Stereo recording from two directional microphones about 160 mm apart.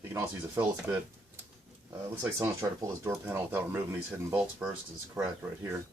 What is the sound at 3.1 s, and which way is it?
Speech, 15° right (ahead or behind).